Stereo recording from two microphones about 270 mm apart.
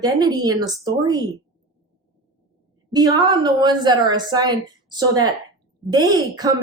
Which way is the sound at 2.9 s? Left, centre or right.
Centre.